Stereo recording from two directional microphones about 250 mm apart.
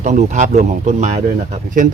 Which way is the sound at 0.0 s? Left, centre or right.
Right.